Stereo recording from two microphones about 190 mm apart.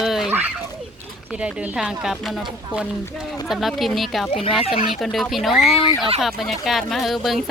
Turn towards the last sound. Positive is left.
turn(degrees=0)  # may be behind; listen again after turning